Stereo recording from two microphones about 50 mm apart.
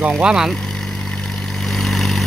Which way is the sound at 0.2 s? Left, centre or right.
Centre.